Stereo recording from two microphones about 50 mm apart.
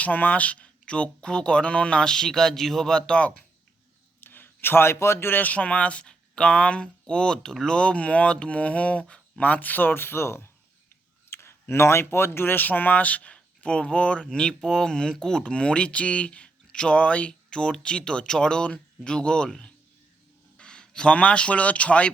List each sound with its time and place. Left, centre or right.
0.0 s speech: left; by 3.2 s centre
4.2 s a man's voice: left
5.4 s speech: left
20.6 s speech: centre